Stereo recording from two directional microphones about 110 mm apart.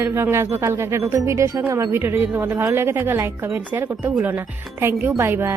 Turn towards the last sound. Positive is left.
turn(degrees=-20)  # may be behind; listen again after turning